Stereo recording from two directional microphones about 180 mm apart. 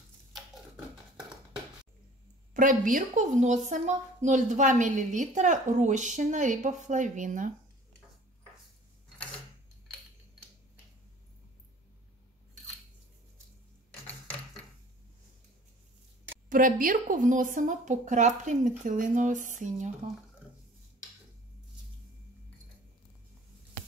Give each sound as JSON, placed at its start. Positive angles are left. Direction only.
{"t": 2.5, "sound": "a woman's voice", "side_deg": -45}
{"t": 16.4, "sound": "a woman's voice", "side_deg": -50}